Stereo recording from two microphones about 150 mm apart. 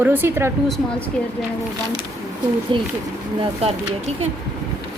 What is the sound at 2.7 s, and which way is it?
Speech, 35° right (ahead or behind).